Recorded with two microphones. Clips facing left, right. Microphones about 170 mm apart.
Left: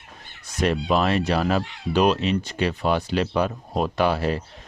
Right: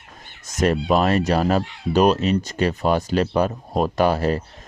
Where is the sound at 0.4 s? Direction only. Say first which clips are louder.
Right 3 dB; 45° right (ahead or behind).